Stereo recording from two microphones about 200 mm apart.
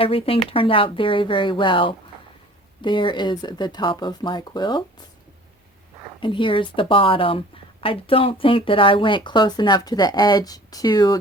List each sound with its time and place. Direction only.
0.0 s speech: 30° left (ahead or behind)
6.1 s speech: 25° left (ahead or behind)